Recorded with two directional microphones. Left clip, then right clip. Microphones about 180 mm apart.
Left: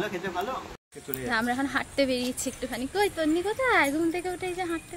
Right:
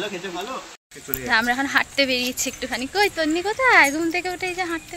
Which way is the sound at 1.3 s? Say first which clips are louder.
Right 8 dB; 5° right (ahead or behind).